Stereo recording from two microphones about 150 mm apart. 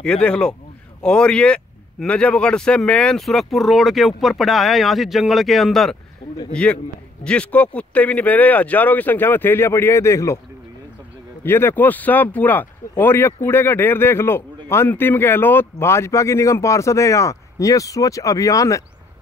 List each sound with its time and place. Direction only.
0.0 s speech: 5° left (ahead or behind)
11.4 s speech: 15° left (ahead or behind)